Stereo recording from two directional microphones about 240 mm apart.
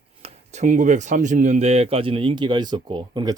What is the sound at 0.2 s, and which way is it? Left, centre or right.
Speech, right.